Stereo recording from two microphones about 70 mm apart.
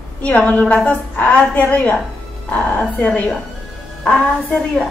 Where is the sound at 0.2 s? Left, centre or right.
Centre.